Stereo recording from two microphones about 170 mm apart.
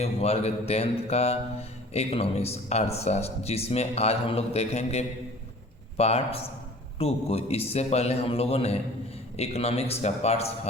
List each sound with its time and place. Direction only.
0.0 s speech: 40° left (ahead or behind)